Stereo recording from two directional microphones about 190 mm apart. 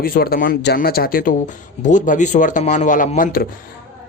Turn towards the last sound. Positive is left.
turn(degrees=50)  # may be behind; listen again after turning